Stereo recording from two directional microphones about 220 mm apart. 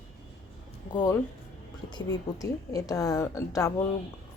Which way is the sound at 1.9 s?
20° left (ahead or behind).